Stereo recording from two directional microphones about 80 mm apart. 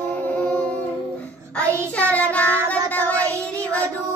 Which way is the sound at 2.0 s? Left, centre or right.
Centre.